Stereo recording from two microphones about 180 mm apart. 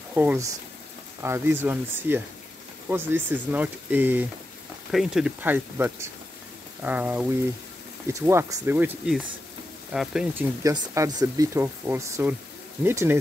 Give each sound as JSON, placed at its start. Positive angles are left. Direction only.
{"t": 0.1, "sound": "speech", "side_deg": -10}
{"t": 10.6, "sound": "speech", "side_deg": -20}